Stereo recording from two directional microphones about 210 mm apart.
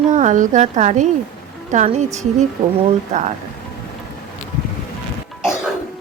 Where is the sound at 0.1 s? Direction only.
35° right (ahead or behind).